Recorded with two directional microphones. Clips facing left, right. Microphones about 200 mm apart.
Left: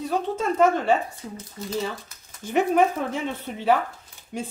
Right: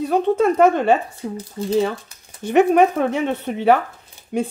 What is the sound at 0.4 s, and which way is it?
Speech, 65° right (ahead or behind).